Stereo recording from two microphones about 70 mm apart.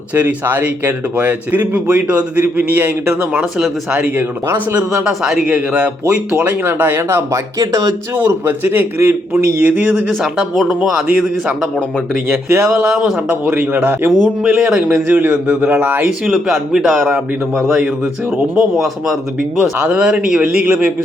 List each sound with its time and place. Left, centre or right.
0.1 s speech: right
4.8 s a man's voice: centre; by 7.4 s right
7.6 s speech: right
8.1 s a man's voice: right
9.3 s speech: right
10.5 s a man's voice: centre
10.8 s speech: centre
12.3 s a man's voice: right
13.2 s speech: right
14.4 s speech: centre
16.2 s a man's voice: centre